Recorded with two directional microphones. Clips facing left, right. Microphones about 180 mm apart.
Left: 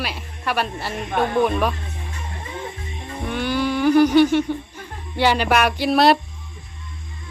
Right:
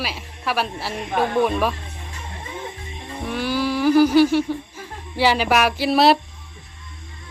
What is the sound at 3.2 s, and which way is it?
Humming, centre (ahead or behind).